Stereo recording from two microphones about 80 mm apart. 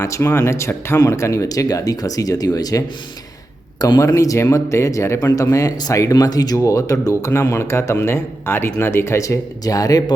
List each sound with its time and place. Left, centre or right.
0.0 s a man's voice: left
4.0 s speech: left